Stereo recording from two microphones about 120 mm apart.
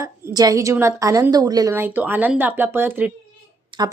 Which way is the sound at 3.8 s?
30° right (ahead or behind).